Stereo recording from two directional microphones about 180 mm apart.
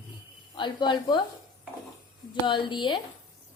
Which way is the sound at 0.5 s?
25° left (ahead or behind).